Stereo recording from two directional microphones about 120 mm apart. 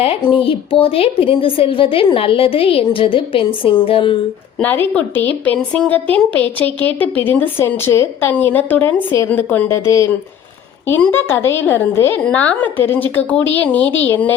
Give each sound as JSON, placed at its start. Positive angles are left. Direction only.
{"t": 0.0, "sound": "a woman's voice", "side_deg": 50}
{"t": 4.6, "sound": "a woman's voice", "side_deg": 15}
{"t": 5.5, "sound": "a woman's voice", "side_deg": 0}
{"t": 5.9, "sound": "a woman's voice", "side_deg": 15}
{"t": 11.1, "sound": "a woman's voice", "side_deg": 20}